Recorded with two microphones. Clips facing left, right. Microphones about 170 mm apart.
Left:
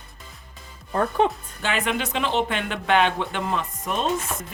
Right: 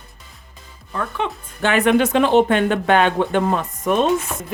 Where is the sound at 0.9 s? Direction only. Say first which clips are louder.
Left 4 dB; 40° left (ahead or behind).